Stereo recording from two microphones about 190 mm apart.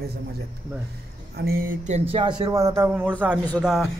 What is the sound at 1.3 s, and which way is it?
Speech, 50° right (ahead or behind).